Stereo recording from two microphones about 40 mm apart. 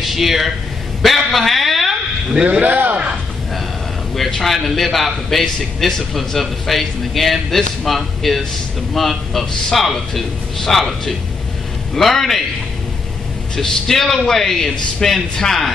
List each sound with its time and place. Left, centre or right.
0.0 s a man's voice: centre
2.6 s a man's voice: right
4.1 s a man's voice: centre
13.6 s a man's voice: centre